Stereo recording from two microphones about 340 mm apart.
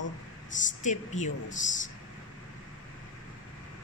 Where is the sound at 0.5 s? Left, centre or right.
Left.